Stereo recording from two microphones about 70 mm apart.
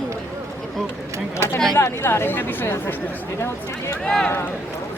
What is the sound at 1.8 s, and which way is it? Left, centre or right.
Speech, left.